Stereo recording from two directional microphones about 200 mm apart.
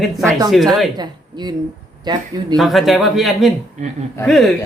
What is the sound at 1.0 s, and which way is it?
Speech, 20° right (ahead or behind).